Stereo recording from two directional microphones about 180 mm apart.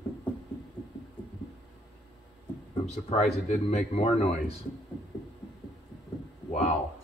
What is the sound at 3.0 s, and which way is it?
Speech, 35° left (ahead or behind).